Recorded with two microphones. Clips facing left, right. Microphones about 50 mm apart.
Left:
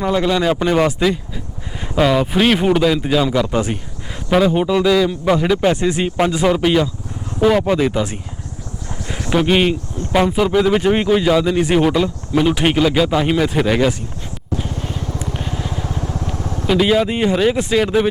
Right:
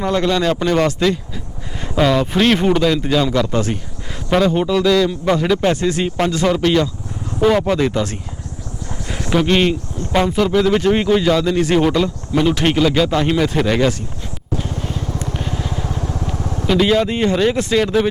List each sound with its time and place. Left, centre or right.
0.0 s speech: centre
5.7 s speech: centre
14.6 s vehicle: centre